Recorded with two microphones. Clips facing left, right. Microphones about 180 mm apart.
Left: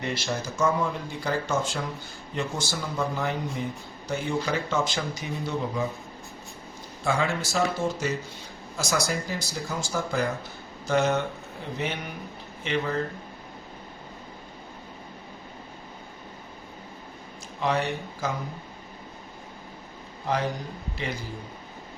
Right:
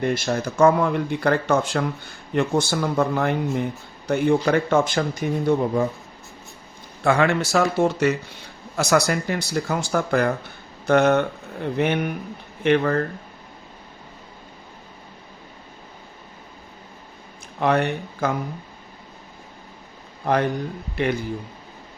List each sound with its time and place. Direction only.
0.0 s speech: 50° right (ahead or behind)
7.0 s speech: 65° right (ahead or behind)
17.6 s speech: 60° right (ahead or behind)
20.2 s speech: 60° right (ahead or behind)